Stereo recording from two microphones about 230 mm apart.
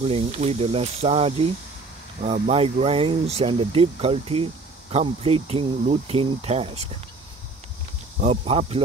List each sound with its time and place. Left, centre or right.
0.0 s speech: right
8.2 s speech: right